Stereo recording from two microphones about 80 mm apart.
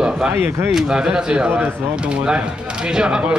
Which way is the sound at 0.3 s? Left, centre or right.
Right.